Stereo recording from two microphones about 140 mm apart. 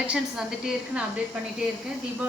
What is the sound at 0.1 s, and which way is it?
Speech, 5° right (ahead or behind).